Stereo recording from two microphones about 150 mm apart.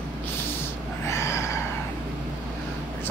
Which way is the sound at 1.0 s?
20° left (ahead or behind).